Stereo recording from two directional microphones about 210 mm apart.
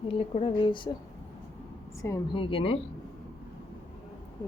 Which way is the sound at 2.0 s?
20° left (ahead or behind).